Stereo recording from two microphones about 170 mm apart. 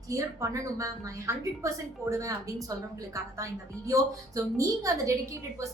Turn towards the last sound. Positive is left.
turn(degrees=-20)  # may be behind; listen again after turning